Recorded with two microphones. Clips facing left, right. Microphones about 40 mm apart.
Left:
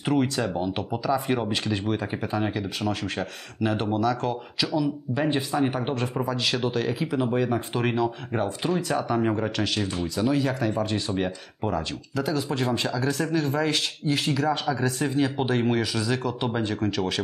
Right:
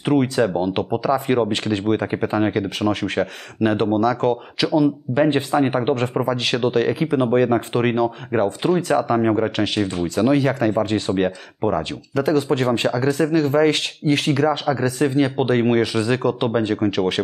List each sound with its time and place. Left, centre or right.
0.0 s speech: right
0.4 s speech: right
7.2 s speech: right
7.7 s speech: right
9.8 s speech: right
12.2 s speech: right
15.0 s speech: right